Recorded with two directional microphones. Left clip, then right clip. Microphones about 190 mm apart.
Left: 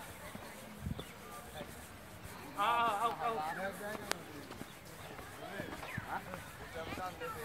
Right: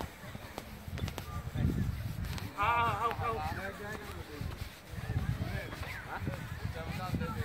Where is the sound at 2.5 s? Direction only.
60° left (ahead or behind).